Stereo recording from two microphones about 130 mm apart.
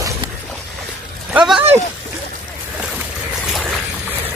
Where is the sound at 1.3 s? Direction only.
5° right (ahead or behind).